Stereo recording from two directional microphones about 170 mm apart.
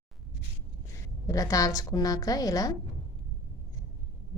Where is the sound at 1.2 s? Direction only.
20° left (ahead or behind).